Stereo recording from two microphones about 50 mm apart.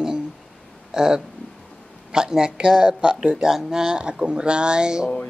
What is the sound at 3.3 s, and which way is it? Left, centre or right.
Speech, centre.